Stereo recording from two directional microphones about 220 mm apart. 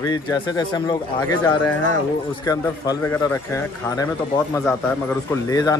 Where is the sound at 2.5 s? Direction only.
15° left (ahead or behind).